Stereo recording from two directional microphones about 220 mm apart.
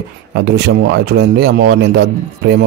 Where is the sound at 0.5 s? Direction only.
50° right (ahead or behind).